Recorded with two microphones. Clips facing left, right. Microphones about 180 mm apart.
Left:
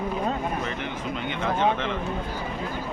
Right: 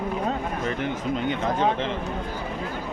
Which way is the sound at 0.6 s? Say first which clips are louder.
Right 3 dB; 45° right (ahead or behind).